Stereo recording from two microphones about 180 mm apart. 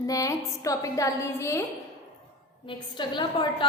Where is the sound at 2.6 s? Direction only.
25° left (ahead or behind).